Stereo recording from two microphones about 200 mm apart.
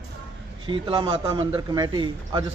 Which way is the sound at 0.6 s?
25° right (ahead or behind).